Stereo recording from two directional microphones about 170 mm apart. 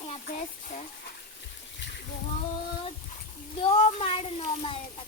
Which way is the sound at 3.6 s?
35° left (ahead or behind).